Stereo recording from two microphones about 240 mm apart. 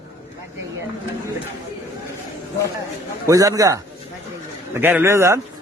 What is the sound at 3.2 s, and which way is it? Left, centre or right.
A man's voice, centre.